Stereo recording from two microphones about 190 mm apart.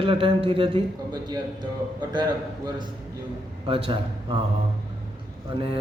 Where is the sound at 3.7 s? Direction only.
25° right (ahead or behind).